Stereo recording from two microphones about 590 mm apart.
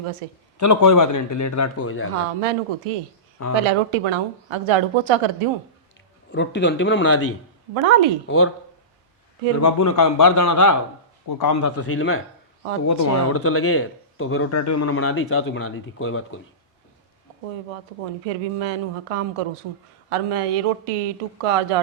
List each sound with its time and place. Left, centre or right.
0.2 s speech: right
0.6 s speech: left
2.4 s speech: right
6.3 s speech: centre
7.7 s speech: right
9.6 s speech: left
18.0 s speech: right